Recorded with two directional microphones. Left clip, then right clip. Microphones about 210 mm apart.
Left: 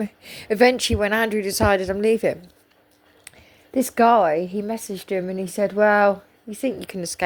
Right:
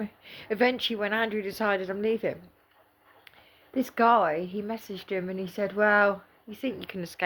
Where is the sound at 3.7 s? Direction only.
35° left (ahead or behind).